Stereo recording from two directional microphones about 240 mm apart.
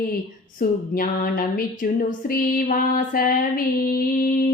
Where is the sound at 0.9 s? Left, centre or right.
Left.